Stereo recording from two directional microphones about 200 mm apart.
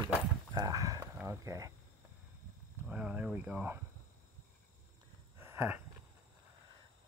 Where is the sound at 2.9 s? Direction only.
5° right (ahead or behind).